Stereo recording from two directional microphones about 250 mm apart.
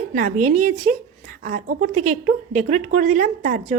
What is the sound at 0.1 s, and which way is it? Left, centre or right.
A woman's voice, right.